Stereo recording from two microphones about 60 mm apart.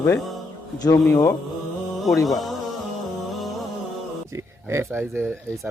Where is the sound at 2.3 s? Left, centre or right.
Centre.